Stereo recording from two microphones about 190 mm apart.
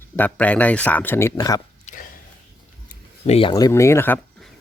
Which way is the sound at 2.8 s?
30° left (ahead or behind).